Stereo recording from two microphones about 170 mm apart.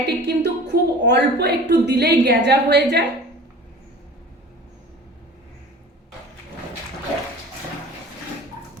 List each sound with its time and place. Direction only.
0.0 s a woman's voice: 80° right